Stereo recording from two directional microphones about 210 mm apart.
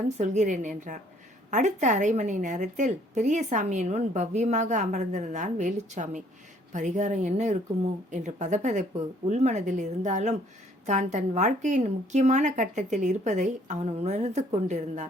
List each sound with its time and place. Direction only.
0.2 s a woman's voice: 35° right (ahead or behind)